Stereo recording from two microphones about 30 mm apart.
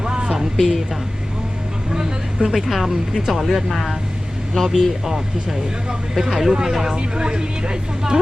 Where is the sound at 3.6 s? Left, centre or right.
Centre.